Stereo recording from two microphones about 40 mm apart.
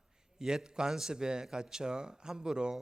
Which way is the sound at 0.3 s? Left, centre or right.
Centre.